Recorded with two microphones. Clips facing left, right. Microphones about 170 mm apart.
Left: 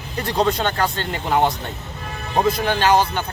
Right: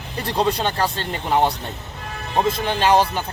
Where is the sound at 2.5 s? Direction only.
30° right (ahead or behind).